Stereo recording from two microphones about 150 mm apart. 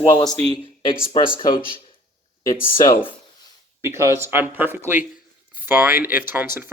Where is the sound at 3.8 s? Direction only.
20° right (ahead or behind).